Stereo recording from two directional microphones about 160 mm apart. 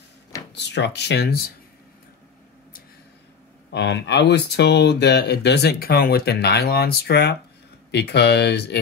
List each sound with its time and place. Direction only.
0.6 s speech: 90° left
3.7 s speech: 90° left